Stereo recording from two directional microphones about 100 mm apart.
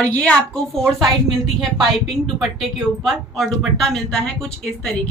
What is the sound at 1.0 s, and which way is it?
A woman's voice, centre (ahead or behind).